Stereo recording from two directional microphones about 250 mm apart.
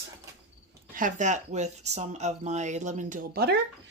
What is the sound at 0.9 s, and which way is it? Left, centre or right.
Speech, right.